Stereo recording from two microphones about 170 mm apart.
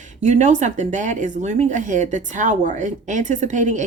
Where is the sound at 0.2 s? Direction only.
45° right (ahead or behind).